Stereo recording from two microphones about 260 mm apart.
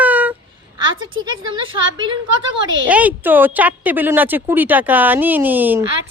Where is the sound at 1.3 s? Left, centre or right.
Centre.